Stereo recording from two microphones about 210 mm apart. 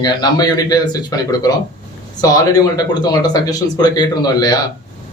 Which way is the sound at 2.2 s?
15° left (ahead or behind).